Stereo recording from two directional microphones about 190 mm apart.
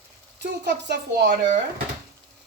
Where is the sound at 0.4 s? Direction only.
60° right (ahead or behind).